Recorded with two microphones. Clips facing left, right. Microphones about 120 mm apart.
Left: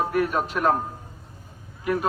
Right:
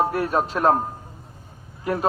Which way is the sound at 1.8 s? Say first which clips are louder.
Even; 35° right (ahead or behind).